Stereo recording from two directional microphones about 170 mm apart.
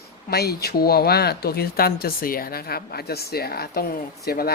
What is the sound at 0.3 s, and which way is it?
Speech, 70° left (ahead or behind).